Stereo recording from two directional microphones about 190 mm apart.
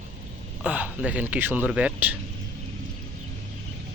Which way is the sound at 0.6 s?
5° right (ahead or behind).